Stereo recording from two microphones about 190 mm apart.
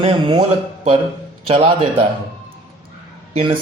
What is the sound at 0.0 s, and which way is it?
Speech, 25° right (ahead or behind).